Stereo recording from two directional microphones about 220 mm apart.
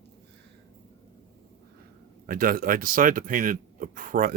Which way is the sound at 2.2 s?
40° right (ahead or behind).